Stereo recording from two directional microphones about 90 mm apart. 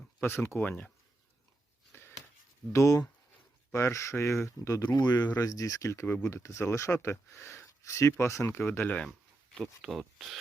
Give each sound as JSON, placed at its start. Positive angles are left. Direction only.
{"t": 0.2, "sound": "speech", "side_deg": 25}
{"t": 1.9, "sound": "a sound", "side_deg": 25}
{"t": 2.7, "sound": "speech", "side_deg": 40}
{"t": 4.9, "sound": "speech", "side_deg": 50}
{"t": 9.0, "sound": "a sound", "side_deg": 5}
{"t": 9.8, "sound": "speech", "side_deg": -5}